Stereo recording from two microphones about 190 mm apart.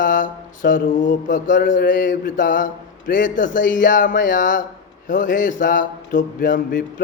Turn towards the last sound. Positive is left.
turn(degrees=45)  # may be behind; listen again after turning